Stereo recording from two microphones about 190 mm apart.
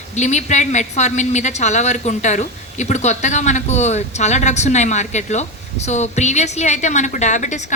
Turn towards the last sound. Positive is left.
turn(degrees=40)  # may be behind; listen again after turning